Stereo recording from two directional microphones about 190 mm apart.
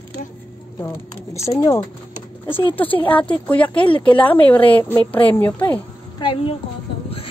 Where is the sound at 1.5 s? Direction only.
15° left (ahead or behind).